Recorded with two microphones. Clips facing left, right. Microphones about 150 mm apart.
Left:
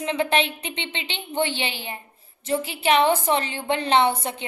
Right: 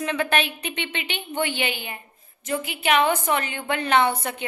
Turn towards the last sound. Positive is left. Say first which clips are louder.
# left 1 dB
turn(degrees=25)  # may be behind; listen again after turning